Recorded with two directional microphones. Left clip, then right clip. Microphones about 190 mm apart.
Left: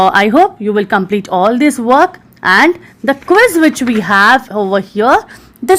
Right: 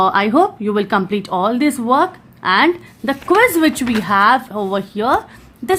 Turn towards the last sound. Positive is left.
turn(degrees=30)  # may be behind; listen again after turning